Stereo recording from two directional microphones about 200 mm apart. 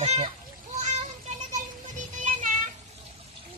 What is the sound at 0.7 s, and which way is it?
Music, 35° right (ahead or behind).